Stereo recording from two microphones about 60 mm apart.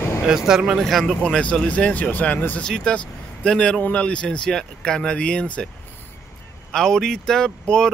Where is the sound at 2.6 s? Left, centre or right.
Centre.